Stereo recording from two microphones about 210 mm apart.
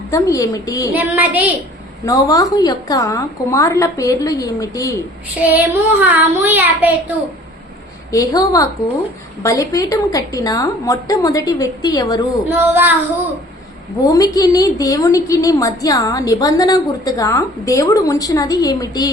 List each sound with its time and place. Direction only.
0.1 s a woman's voice: 15° left (ahead or behind)
0.9 s child singing: 10° right (ahead or behind)
2.0 s a woman's voice: 15° left (ahead or behind)
5.4 s child singing: 5° right (ahead or behind)
8.1 s a woman's voice: 15° left (ahead or behind)
12.5 s child singing: 10° right (ahead or behind)
14.0 s a woman's voice: 15° left (ahead or behind)